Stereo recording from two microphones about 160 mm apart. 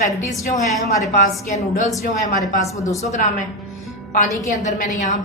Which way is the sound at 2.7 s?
20° left (ahead or behind).